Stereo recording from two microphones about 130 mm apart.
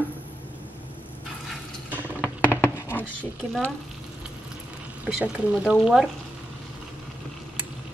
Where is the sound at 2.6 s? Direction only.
20° left (ahead or behind).